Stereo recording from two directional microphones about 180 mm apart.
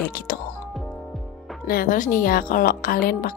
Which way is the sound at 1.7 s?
50° left (ahead or behind).